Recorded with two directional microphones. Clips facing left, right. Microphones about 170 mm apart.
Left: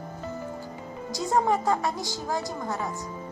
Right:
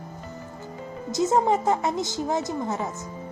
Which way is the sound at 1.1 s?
20° right (ahead or behind).